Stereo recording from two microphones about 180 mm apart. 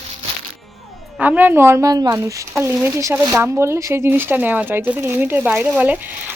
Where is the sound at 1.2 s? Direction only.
10° right (ahead or behind).